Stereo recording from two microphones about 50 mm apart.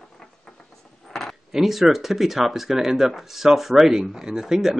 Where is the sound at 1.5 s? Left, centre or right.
Centre.